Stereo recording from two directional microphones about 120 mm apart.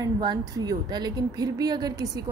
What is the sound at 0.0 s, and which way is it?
A woman's voice, 35° right (ahead or behind).